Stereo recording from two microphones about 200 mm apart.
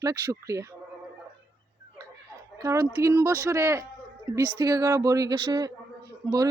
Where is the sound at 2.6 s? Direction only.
15° right (ahead or behind).